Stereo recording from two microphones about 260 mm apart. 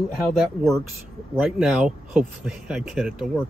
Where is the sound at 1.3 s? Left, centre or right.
Centre.